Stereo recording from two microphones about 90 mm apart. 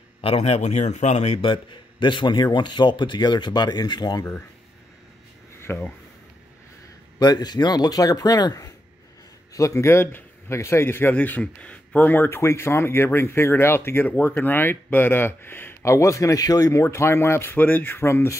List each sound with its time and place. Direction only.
1.4 s a man's voice: 65° left (ahead or behind); by 4.4 s 45° left (ahead or behind)
5.6 s a sound: 25° left (ahead or behind)
7.2 s speech: 50° left (ahead or behind); by 18.3 s 30° left (ahead or behind)